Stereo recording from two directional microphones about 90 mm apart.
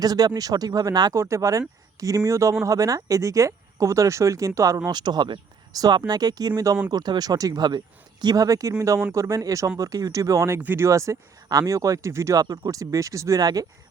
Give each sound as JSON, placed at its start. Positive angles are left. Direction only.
{"t": 0.0, "sound": "speech", "side_deg": -45}
{"t": 1.1, "sound": "speech", "side_deg": -35}
{"t": 4.9, "sound": "speech", "side_deg": -50}
{"t": 10.6, "sound": "speech", "side_deg": -20}
{"t": 10.8, "sound": "speech", "side_deg": -35}